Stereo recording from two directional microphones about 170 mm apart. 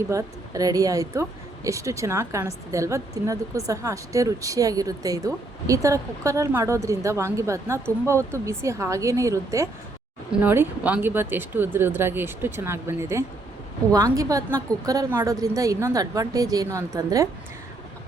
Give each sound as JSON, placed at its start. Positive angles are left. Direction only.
{"t": 0.1, "sound": "a woman's voice", "side_deg": -20}